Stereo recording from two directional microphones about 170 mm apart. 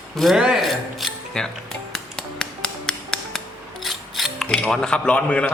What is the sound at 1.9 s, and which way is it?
Music, 5° left (ahead or behind).